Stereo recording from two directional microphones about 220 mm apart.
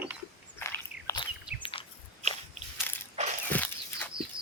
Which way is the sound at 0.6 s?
10° left (ahead or behind).